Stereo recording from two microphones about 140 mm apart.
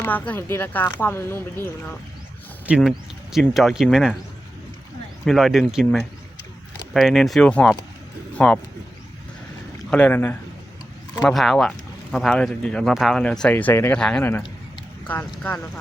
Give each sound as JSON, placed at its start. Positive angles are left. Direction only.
{"t": 0.0, "sound": "speech", "side_deg": 15}
{"t": 2.6, "sound": "speech", "side_deg": -10}
{"t": 5.2, "sound": "speech", "side_deg": 0}
{"t": 9.9, "sound": "speech", "side_deg": 10}
{"t": 11.2, "sound": "speech", "side_deg": 0}